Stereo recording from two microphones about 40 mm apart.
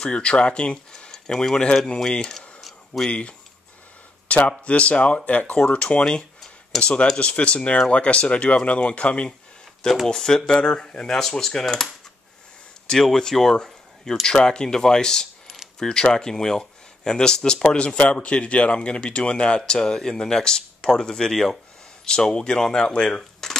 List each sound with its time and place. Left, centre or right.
0.0 s speech: left
1.2 s speech: centre
2.3 s a sound: centre
3.1 s speech: left
4.5 s speech: left
10.0 s speech: centre
13.0 s speech: centre
17.7 s speech: left